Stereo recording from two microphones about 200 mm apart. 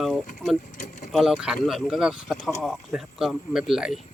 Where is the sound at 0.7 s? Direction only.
40° left (ahead or behind).